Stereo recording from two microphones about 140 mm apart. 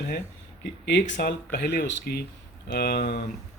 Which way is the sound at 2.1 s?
90° left.